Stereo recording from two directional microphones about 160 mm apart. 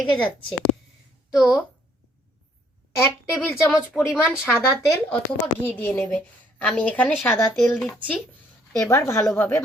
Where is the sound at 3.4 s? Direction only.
Centre (ahead or behind).